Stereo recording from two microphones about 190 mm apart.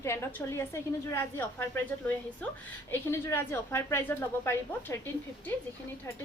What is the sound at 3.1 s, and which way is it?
A woman's voice, 15° left (ahead or behind).